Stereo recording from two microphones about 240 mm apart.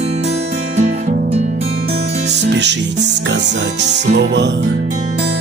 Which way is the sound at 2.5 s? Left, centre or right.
Right.